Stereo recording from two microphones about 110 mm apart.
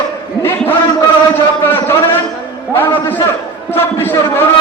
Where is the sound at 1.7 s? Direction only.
20° left (ahead or behind).